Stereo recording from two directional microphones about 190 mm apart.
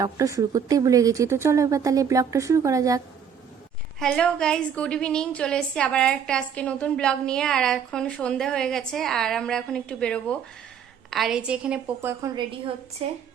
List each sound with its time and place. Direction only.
0.0 s speech: 20° right (ahead or behind)
4.0 s a woman's voice: 5° left (ahead or behind)
12.2 s a woman's voice: 25° right (ahead or behind)